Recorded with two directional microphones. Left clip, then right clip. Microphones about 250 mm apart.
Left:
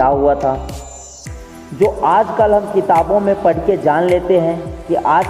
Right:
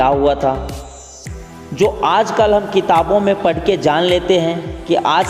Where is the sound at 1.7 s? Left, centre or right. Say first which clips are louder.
Left 1 dB; right.